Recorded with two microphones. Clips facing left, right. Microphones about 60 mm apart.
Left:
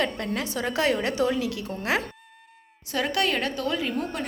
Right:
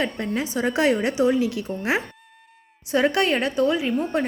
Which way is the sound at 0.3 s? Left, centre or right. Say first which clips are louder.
Right 5 dB; right.